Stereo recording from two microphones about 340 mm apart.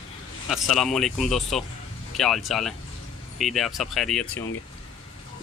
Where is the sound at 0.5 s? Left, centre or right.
Centre.